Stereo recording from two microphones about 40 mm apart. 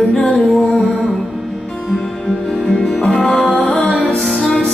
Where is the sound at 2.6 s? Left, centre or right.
Centre.